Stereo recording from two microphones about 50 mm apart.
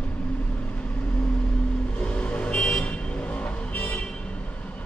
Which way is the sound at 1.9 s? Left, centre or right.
Left.